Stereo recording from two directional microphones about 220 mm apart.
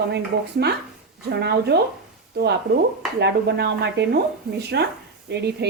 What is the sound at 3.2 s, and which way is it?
Speech, 50° right (ahead or behind).